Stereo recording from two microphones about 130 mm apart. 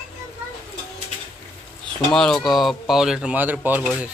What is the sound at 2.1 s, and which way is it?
Speech, 5° left (ahead or behind).